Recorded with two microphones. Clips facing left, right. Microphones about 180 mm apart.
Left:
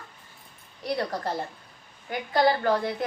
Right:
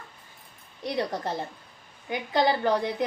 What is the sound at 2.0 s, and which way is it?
A woman's voice, 20° right (ahead or behind).